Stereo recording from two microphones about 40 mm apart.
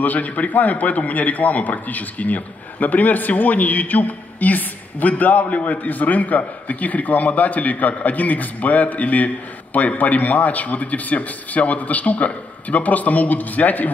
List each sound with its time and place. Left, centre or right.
0.0 s a man's voice: left